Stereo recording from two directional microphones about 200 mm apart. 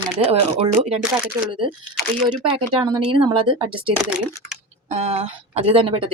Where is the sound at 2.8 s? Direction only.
20° right (ahead or behind).